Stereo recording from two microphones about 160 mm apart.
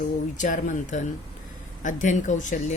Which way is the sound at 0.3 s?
55° left (ahead or behind).